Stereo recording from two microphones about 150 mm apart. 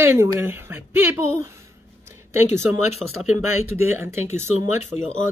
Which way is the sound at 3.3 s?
15° right (ahead or behind).